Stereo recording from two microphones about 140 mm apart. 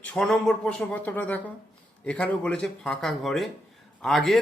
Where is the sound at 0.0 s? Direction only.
10° left (ahead or behind).